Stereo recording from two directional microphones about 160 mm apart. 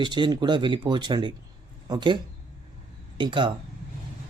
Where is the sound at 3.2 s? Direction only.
30° right (ahead or behind).